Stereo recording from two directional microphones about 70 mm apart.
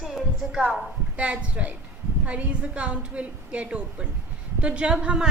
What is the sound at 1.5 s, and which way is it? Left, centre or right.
A woman's voice, right.